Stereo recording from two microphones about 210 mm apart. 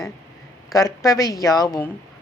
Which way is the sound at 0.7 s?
15° left (ahead or behind).